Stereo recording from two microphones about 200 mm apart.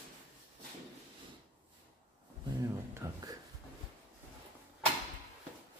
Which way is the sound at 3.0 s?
15° right (ahead or behind).